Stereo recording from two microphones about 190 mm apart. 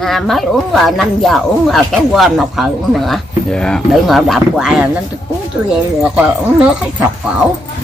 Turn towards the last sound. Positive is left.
turn(degrees=-5)  # may be behind; listen again after turning